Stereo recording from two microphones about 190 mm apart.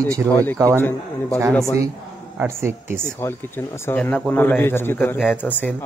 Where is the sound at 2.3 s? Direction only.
15° right (ahead or behind).